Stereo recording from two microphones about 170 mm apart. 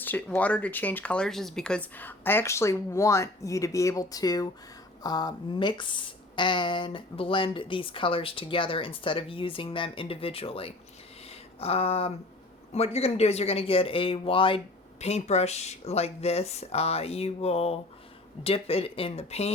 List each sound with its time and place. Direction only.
0.0 s speech: 10° left (ahead or behind); by 10.8 s 35° left (ahead or behind)
11.3 s a sound: 35° left (ahead or behind)
12.7 s speech: 35° left (ahead or behind)